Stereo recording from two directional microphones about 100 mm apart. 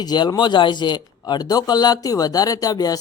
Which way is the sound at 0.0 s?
45° left (ahead or behind).